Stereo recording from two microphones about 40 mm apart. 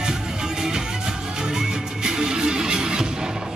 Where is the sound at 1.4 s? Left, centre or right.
Centre.